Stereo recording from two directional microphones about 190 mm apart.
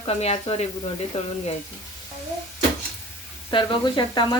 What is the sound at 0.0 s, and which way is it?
Speech, 35° left (ahead or behind).